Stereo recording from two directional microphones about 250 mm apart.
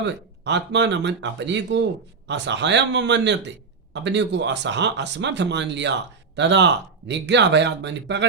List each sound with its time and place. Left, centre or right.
0.0 s speech: right